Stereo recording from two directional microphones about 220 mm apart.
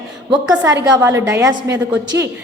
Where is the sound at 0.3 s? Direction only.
15° right (ahead or behind).